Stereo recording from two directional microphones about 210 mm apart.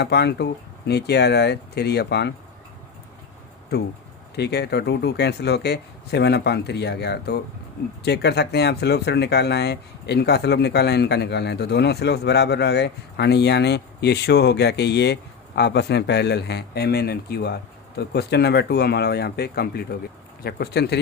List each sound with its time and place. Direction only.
0.0 s speech: 55° left (ahead or behind)
4.4 s speech: 50° left (ahead or behind)